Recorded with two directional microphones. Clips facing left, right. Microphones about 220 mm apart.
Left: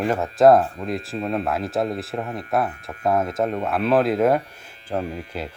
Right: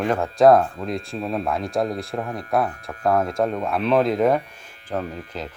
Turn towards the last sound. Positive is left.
turn(degrees=10)  # may be behind; listen again after turning